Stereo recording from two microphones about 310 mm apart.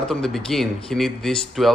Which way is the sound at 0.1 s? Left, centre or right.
Centre.